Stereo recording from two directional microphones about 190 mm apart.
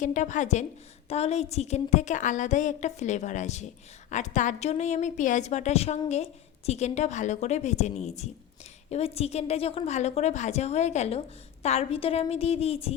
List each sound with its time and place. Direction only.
0.0 s a woman's voice: 40° left (ahead or behind)